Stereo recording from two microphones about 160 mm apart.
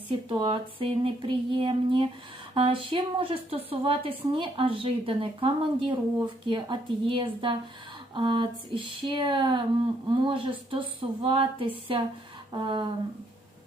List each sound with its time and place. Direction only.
0.1 s speech: 30° right (ahead or behind)